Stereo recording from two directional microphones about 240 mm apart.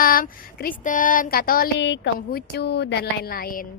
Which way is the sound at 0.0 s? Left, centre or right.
Left.